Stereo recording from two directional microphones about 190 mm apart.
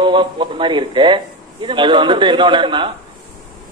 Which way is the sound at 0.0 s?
25° right (ahead or behind).